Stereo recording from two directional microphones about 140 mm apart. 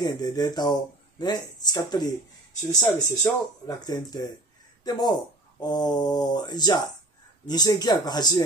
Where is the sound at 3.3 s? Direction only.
15° left (ahead or behind).